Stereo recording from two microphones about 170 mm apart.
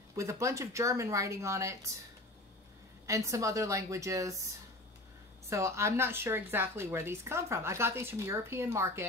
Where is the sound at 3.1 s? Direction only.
20° right (ahead or behind).